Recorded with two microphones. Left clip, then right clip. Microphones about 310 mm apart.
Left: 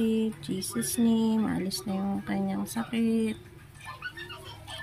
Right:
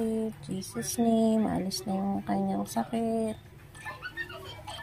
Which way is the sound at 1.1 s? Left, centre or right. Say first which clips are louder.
Right 5 dB; centre.